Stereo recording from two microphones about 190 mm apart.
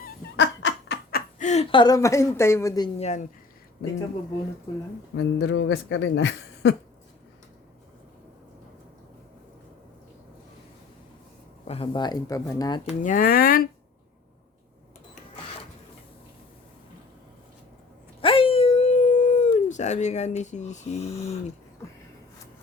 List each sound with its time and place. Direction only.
0.3 s laughter: 65° left (ahead or behind)
1.4 s a woman's voice: 40° left (ahead or behind)
1.7 s a woman's voice: 20° left (ahead or behind)
3.0 s speech: 40° left (ahead or behind)
5.1 s speech: 70° left (ahead or behind)
11.7 s speech: 25° left (ahead or behind)
13.0 s speech: 45° left (ahead or behind)
18.2 s dog: 30° left (ahead or behind)